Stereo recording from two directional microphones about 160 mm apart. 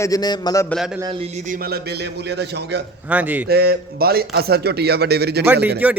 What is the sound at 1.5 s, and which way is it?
A man's voice, 75° right (ahead or behind).